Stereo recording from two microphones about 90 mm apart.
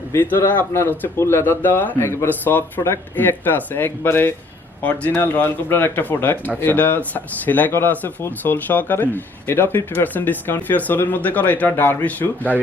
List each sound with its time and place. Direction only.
0.1 s speech: 25° left (ahead or behind)